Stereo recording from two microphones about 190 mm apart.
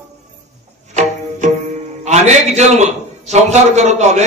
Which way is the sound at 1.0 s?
40° right (ahead or behind).